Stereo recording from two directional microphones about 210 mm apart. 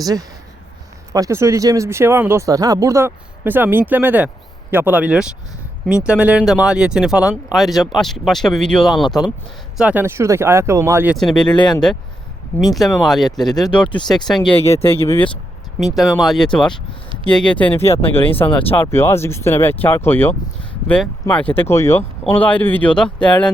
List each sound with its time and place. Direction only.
0.0 s speech: 15° right (ahead or behind); by 11.4 s centre (ahead or behind)
11.4 s speech: 20° left (ahead or behind)
12.7 s speech: centre (ahead or behind)
14.4 s speech: 30° left (ahead or behind)
14.9 s speech: 10° left (ahead or behind)
15.8 s speech: centre (ahead or behind)
17.8 s speech: 25° left (ahead or behind)
18.7 s speech: 10° left (ahead or behind)